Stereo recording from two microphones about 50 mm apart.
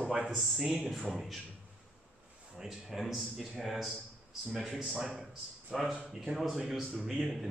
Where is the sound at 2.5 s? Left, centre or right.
Centre.